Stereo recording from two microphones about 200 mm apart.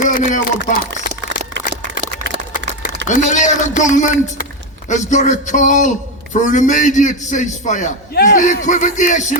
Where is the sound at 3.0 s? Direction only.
40° left (ahead or behind).